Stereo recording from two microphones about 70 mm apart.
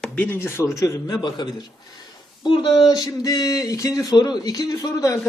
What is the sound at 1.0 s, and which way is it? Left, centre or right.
Speech, left.